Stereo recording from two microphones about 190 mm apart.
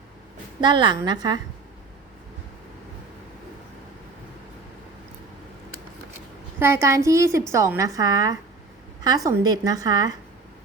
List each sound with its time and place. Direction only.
0.6 s a woman's voice: 25° right (ahead or behind)
6.6 s a child's voice: 15° right (ahead or behind)